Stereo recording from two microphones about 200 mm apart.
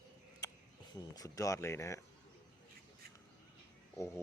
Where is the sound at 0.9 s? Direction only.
20° left (ahead or behind).